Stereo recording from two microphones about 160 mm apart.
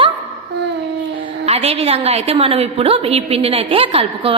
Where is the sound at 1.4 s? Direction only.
40° right (ahead or behind).